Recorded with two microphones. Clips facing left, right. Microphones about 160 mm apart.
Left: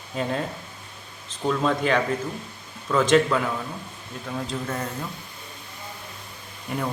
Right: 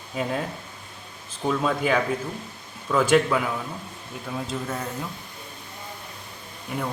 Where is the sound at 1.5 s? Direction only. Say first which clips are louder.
Left 1 dB; 5° right (ahead or behind).